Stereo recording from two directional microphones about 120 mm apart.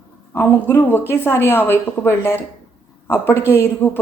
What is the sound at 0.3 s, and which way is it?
A woman's voice, 15° left (ahead or behind).